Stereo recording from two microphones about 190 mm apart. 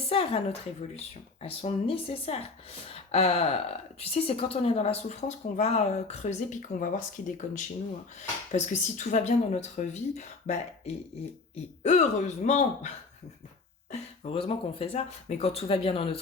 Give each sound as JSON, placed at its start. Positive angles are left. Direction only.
{"t": 0.1, "sound": "a woman's voice", "side_deg": 30}
{"t": 14.3, "sound": "a woman's voice", "side_deg": 30}